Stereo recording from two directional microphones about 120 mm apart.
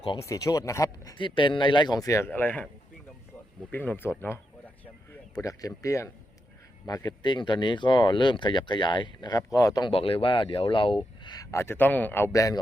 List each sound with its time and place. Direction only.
0.2 s speech: 25° left (ahead or behind)
1.2 s speech: 45° left (ahead or behind); by 2.6 s 15° left (ahead or behind)
3.7 s speech: 15° left (ahead or behind)
5.4 s speech: 30° left (ahead or behind)
9.9 s speech: 50° left (ahead or behind)
11.5 s speech: 20° left (ahead or behind)
12.3 s speech: 30° left (ahead or behind)